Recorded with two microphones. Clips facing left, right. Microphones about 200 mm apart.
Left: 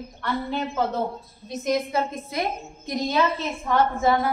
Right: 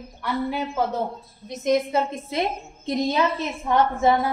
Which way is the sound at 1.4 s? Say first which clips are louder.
Right 3 dB; 20° right (ahead or behind).